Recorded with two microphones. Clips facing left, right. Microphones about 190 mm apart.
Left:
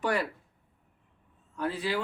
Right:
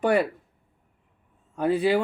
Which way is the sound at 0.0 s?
55° right (ahead or behind).